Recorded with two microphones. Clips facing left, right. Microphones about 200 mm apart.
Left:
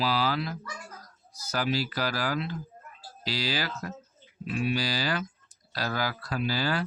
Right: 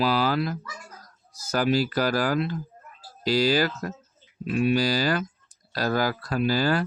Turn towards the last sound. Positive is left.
turn(degrees=-45)  # may be behind; listen again after turning